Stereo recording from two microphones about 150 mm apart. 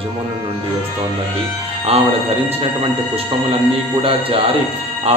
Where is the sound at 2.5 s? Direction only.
40° right (ahead or behind).